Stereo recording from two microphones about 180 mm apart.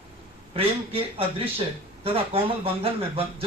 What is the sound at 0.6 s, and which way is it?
Speech, 30° right (ahead or behind).